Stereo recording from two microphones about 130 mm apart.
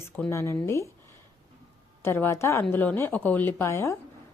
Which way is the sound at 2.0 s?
20° left (ahead or behind).